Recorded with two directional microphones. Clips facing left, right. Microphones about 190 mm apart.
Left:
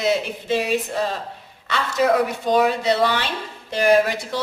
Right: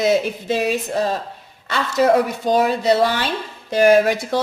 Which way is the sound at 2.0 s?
35° right (ahead or behind).